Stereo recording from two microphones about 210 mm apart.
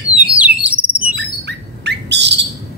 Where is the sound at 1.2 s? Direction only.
55° right (ahead or behind).